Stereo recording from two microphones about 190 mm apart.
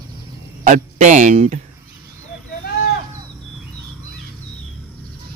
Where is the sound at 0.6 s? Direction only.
40° right (ahead or behind).